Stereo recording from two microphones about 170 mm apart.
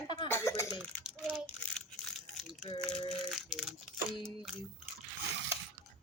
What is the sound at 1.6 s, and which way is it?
Crushing, 5° left (ahead or behind).